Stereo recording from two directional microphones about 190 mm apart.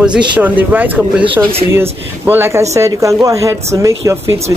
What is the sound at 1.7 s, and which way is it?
Speech, 10° right (ahead or behind).